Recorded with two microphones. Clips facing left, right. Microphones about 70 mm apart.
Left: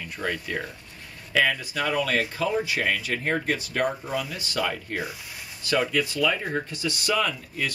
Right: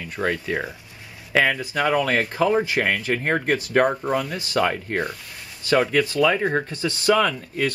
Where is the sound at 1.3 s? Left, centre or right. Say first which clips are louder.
Right 3 dB; right.